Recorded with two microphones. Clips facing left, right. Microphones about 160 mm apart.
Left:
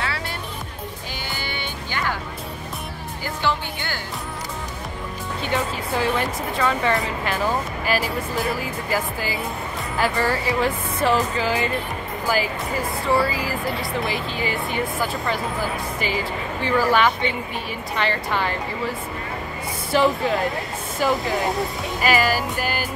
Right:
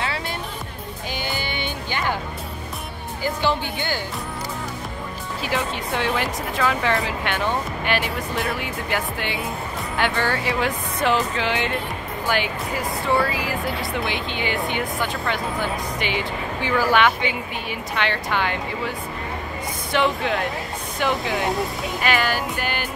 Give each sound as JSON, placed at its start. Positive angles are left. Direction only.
{"t": 1.2, "sound": "music", "side_deg": -20}
{"t": 3.4, "sound": "speech", "side_deg": -20}
{"t": 5.4, "sound": "speech", "side_deg": 0}
{"t": 13.0, "sound": "speech", "side_deg": 0}